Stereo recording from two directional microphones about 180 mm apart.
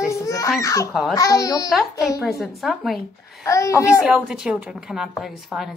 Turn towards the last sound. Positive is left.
turn(degrees=0)  # may be behind; listen again after turning